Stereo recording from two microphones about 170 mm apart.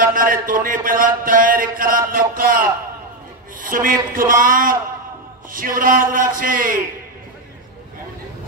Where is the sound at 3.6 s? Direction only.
55° right (ahead or behind).